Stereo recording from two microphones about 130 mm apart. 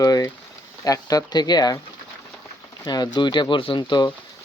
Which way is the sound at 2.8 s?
30° left (ahead or behind).